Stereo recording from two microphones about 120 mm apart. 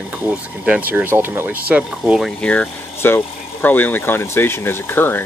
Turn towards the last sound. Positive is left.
turn(degrees=15)  # may be behind; listen again after turning